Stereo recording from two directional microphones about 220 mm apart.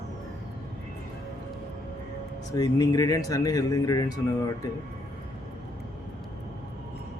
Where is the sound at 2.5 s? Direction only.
15° left (ahead or behind).